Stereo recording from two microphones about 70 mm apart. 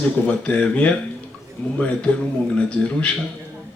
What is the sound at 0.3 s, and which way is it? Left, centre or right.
Speech, centre.